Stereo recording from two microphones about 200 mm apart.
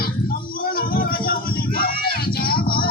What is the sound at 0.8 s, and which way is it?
Music, 45° left (ahead or behind).